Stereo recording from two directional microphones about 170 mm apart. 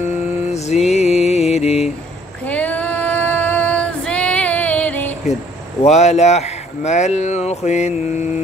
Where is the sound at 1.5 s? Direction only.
40° left (ahead or behind).